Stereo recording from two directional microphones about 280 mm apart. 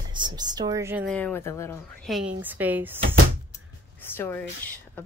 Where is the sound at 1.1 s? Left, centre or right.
Centre.